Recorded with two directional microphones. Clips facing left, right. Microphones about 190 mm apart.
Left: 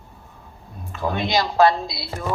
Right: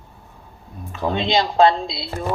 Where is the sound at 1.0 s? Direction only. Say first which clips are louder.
Right 2 dB; 25° right (ahead or behind).